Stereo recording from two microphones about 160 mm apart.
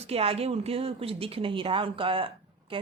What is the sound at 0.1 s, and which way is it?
A woman's voice, 40° right (ahead or behind).